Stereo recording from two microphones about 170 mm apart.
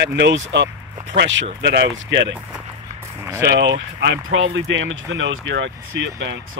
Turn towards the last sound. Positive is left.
turn(degrees=-90)